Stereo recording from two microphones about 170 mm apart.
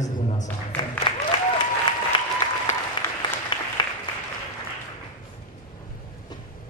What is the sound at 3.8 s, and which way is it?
Applause, 25° left (ahead or behind).